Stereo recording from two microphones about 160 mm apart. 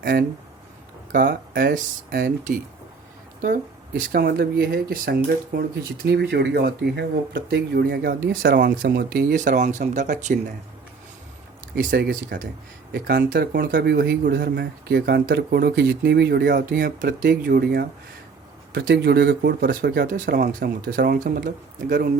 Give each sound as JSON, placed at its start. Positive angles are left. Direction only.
{"t": 0.0, "sound": "speech", "side_deg": -90}
{"t": 1.1, "sound": "speech", "side_deg": -60}
{"t": 4.1, "sound": "speech", "side_deg": -75}
{"t": 9.3, "sound": "speech", "side_deg": -55}
{"t": 11.7, "sound": "speech", "side_deg": -75}
{"t": 18.7, "sound": "speech", "side_deg": -90}
{"t": 20.1, "sound": "speech", "side_deg": -55}